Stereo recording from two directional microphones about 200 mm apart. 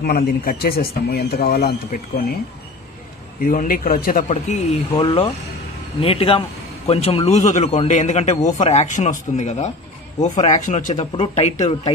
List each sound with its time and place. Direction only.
0.0 s a man's voice: 50° left (ahead or behind)
3.3 s a man's voice: 45° left (ahead or behind)